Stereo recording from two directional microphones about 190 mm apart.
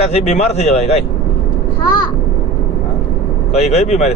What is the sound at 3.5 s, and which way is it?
Speech, 35° left (ahead or behind).